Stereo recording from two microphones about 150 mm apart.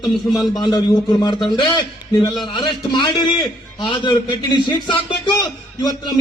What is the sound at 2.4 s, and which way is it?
A man's voice, 30° left (ahead or behind).